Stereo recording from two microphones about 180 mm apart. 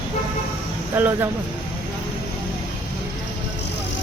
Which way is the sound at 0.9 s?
10° right (ahead or behind).